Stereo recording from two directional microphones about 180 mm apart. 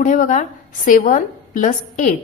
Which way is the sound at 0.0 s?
45° left (ahead or behind).